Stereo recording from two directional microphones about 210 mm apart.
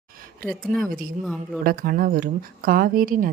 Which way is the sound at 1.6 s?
45° right (ahead or behind).